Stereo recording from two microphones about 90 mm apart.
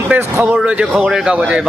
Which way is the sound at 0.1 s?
20° right (ahead or behind).